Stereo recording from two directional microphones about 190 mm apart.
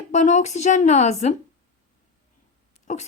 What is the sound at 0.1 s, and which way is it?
A woman's voice, 40° left (ahead or behind).